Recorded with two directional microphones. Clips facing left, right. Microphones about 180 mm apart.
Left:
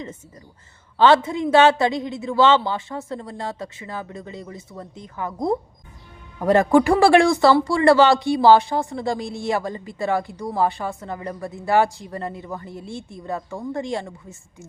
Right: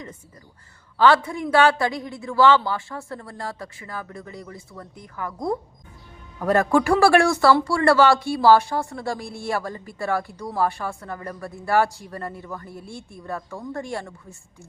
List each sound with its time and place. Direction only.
0.9 s speech: 25° left (ahead or behind)